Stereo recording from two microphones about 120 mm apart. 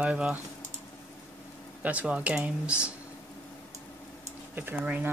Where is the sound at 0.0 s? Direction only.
10° right (ahead or behind).